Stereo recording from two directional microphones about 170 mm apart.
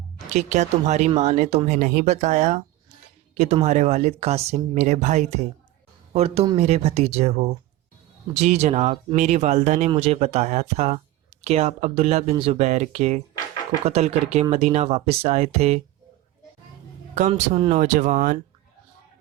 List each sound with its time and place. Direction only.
0.3 s speech: 45° right (ahead or behind)
17.5 s speech: 40° right (ahead or behind)